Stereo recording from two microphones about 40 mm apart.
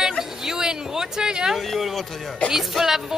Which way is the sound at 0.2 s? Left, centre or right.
Centre.